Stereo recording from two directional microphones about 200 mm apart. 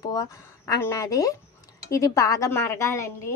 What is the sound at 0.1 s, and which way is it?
Speech, 20° left (ahead or behind).